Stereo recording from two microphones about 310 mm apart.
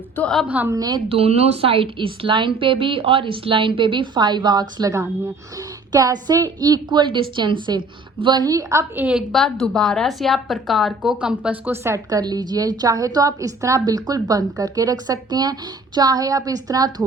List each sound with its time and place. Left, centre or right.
0.2 s a woman's voice: centre